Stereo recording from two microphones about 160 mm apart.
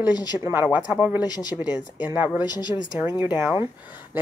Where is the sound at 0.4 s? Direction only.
15° right (ahead or behind).